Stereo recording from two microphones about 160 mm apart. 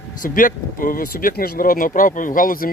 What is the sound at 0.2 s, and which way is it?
Speech, 55° left (ahead or behind).